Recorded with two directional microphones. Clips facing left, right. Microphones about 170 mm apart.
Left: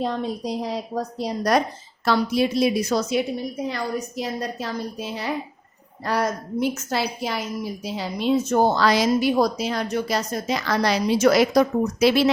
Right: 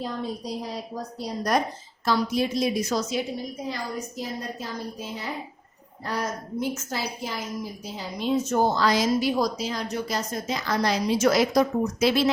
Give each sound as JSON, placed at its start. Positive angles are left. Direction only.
{"t": 0.0, "sound": "a woman's voice", "side_deg": 85}